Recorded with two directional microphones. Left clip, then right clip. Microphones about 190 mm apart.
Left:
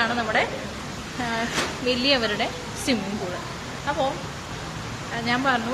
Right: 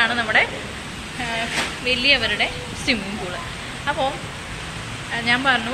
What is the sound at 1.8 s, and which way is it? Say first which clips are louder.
Speech: right 4 dB; 35° left (ahead or behind).